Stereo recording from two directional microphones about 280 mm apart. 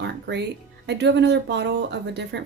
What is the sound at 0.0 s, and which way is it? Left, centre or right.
Music, right.